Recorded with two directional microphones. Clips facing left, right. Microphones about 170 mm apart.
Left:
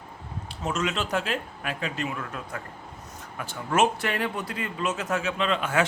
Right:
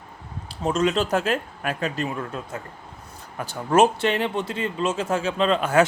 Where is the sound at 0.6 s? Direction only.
35° right (ahead or behind).